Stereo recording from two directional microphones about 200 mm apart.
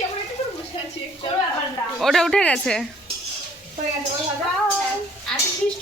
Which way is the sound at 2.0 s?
Centre (ahead or behind).